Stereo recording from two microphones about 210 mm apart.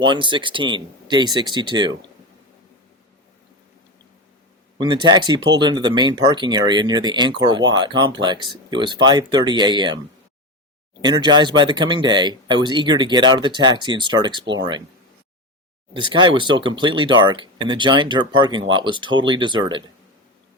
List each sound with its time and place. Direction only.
0.0 s speech: 20° right (ahead or behind)
4.8 s speech: 20° right (ahead or behind)
11.0 s speech: 20° right (ahead or behind)
15.9 s speech: 20° right (ahead or behind)